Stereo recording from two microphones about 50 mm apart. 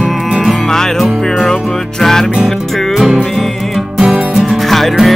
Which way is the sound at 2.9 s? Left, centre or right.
Centre.